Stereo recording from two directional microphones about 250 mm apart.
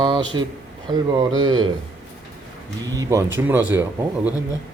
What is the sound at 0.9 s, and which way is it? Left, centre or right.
Mantra, centre.